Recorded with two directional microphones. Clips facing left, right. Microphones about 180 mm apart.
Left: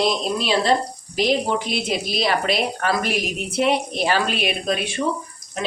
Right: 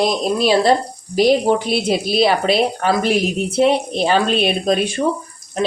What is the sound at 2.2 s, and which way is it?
A woman's voice, 30° right (ahead or behind).